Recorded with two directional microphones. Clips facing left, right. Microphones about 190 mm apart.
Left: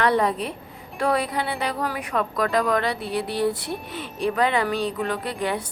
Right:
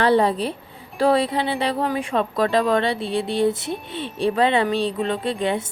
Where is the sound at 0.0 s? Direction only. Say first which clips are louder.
Right 3 dB; 30° right (ahead or behind).